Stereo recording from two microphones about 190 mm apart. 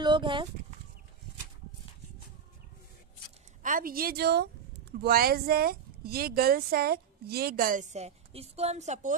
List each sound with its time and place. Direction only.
0.0 s speech: 25° right (ahead or behind)
3.6 s speech: 45° right (ahead or behind)